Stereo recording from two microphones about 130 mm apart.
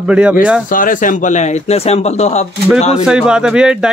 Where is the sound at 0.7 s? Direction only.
90° left; by 3.0 s 60° left (ahead or behind).